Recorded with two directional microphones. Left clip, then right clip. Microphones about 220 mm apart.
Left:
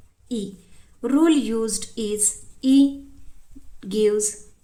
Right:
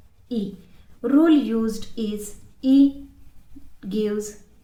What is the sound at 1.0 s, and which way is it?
A woman's voice, 35° left (ahead or behind).